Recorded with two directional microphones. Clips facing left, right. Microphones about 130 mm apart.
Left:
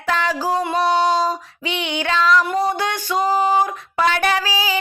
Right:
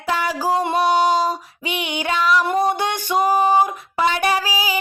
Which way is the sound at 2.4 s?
25° right (ahead or behind).